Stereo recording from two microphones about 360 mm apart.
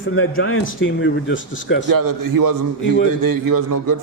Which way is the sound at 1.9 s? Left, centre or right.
Right.